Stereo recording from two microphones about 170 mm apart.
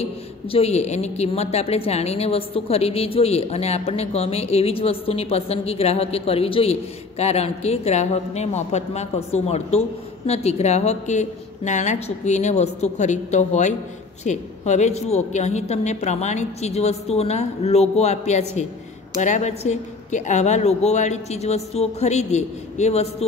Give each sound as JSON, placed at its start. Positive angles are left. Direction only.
{"t": 0.0, "sound": "a man's voice", "side_deg": 35}